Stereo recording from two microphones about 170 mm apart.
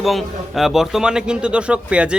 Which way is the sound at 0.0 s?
Centre (ahead or behind).